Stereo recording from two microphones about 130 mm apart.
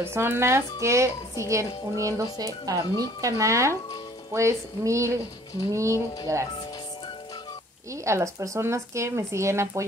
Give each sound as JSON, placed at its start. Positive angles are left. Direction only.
{"t": 0.0, "sound": "speech", "side_deg": -20}
{"t": 7.9, "sound": "speech", "side_deg": -25}